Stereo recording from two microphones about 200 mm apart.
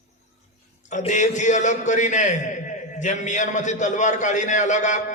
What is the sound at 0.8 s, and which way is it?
A man's voice, 35° left (ahead or behind).